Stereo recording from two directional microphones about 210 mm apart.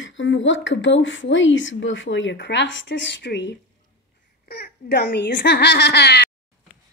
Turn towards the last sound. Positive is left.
turn(degrees=55)  # may be behind; listen again after turning